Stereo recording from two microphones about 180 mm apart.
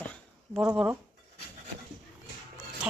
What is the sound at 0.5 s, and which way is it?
Speech, 10° right (ahead or behind).